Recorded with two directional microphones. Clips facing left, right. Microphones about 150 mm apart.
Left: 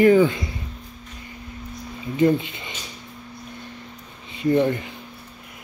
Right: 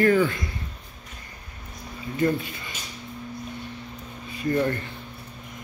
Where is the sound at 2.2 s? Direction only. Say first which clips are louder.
Left 5 dB; 20° left (ahead or behind).